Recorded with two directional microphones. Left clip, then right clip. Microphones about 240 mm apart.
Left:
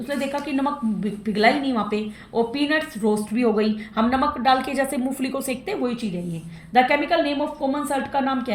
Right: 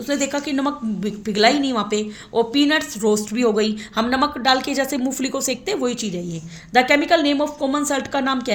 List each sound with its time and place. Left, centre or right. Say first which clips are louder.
0.1 s a woman's voice: right 3 dB; right